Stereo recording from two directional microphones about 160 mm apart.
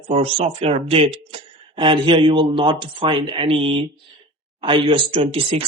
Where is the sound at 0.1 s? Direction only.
40° right (ahead or behind).